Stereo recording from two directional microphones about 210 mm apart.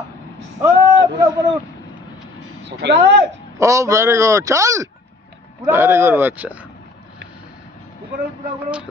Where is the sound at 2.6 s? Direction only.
55° right (ahead or behind).